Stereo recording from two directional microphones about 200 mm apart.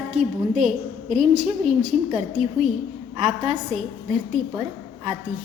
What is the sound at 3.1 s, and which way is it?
Speech, 30° right (ahead or behind).